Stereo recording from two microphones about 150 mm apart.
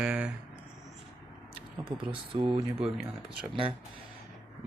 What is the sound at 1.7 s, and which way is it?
Speech, 30° right (ahead or behind).